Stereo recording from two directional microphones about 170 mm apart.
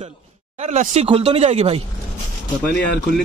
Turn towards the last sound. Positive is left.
turn(degrees=5)  # may be behind; listen again after turning